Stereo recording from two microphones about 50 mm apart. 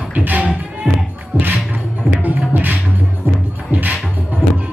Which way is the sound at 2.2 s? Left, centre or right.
Right.